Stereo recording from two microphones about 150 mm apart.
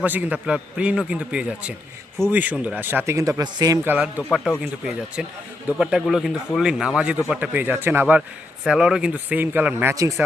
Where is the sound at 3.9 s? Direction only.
10° right (ahead or behind).